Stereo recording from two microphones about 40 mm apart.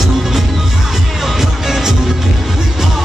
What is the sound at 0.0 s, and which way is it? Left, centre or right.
Music, centre.